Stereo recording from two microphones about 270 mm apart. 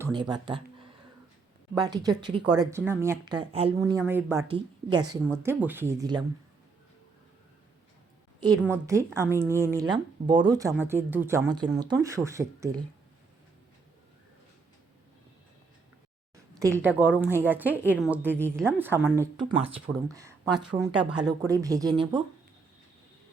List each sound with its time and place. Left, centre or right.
0.0 s speech: centre
8.6 s speech: centre
16.6 s speech: centre
19.2 s speech: centre